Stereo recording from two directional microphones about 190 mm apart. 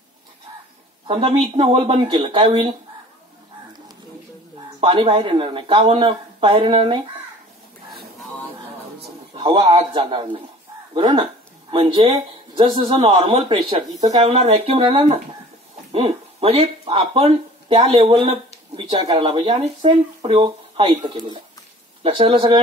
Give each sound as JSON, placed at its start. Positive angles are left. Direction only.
{"t": 1.0, "sound": "speech", "side_deg": -25}
{"t": 4.7, "sound": "speech", "side_deg": -25}
{"t": 9.3, "sound": "speech", "side_deg": -25}